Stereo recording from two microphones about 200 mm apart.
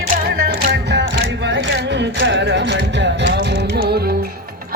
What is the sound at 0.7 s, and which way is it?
Music, 60° right (ahead or behind).